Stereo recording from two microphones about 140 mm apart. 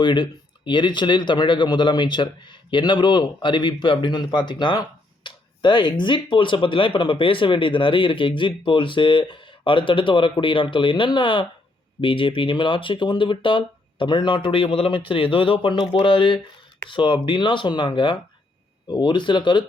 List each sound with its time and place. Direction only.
0.0 s speech: 35° left (ahead or behind)